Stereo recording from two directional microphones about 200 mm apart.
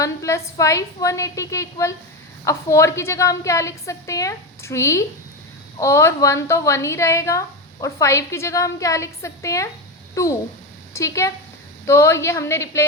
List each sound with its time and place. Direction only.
0.0 s a woman's voice: 15° left (ahead or behind)